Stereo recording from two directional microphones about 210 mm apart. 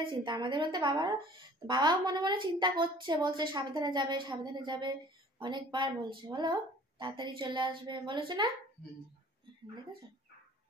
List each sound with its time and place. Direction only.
0.0 s a woman's voice: 20° right (ahead or behind)